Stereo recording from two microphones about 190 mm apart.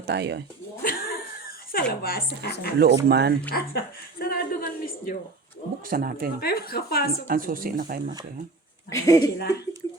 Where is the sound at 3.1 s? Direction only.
60° right (ahead or behind).